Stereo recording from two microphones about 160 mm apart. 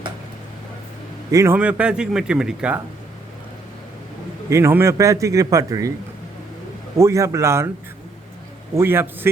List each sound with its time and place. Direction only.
1.3 s a man's voice: 20° right (ahead or behind)
1.5 s speech: 5° right (ahead or behind)
4.4 s a man's voice: 15° right (ahead or behind)
6.9 s speech: 20° right (ahead or behind)
8.7 s speech: 15° right (ahead or behind)